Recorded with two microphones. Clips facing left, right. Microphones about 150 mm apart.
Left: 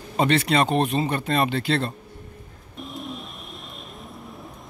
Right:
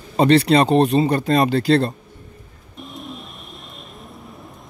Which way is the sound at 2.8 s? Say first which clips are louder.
Even; centre (ahead or behind).